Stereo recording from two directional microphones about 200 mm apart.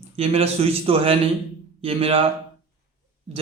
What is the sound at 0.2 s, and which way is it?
Speech, 30° right (ahead or behind).